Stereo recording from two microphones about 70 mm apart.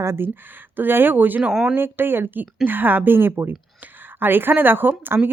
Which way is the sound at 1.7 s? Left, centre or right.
Right.